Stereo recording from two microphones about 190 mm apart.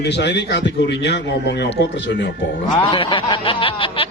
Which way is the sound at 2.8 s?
25° left (ahead or behind).